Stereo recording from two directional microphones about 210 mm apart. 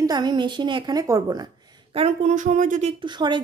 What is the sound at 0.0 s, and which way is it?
A woman's voice, 20° right (ahead or behind).